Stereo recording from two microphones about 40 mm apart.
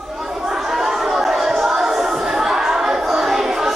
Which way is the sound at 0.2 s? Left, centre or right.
Centre.